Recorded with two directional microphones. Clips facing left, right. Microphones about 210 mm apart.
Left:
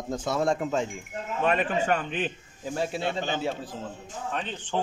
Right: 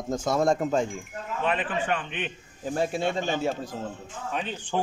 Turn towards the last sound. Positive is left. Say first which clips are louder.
# right 1 dB
turn(degrees=-10)  # may be behind; listen again after turning